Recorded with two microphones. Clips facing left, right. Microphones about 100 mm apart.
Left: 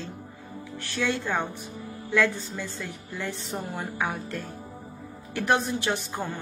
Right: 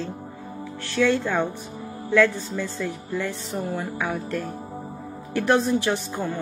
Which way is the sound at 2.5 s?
20° left (ahead or behind).